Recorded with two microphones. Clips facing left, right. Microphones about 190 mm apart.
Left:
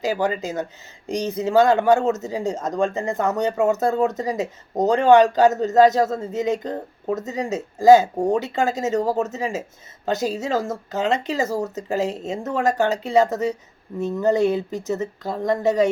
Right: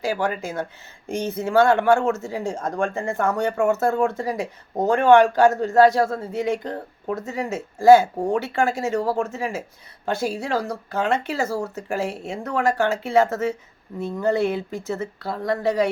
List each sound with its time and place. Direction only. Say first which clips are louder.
0.0 s speech: left 2 dB; 20° left (ahead or behind)